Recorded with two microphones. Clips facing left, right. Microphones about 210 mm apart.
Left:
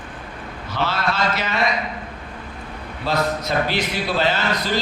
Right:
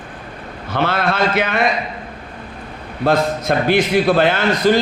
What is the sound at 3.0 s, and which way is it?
A man's voice, 50° right (ahead or behind).